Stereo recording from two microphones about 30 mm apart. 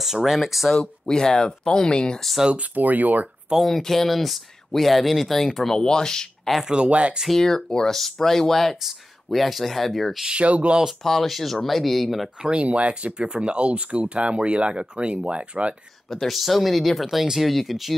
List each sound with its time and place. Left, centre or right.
0.0 s speech: centre
1.0 s speech: left
2.5 s speech: right
3.6 s speech: centre
5.4 s speech: centre
5.8 s speech: left
6.9 s speech: right
7.3 s speech: centre
9.3 s speech: centre
10.3 s speech: right
11.1 s speech: centre
12.6 s speech: right
16.1 s speech: centre